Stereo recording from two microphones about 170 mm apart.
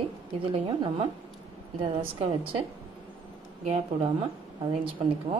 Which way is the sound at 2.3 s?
30° right (ahead or behind).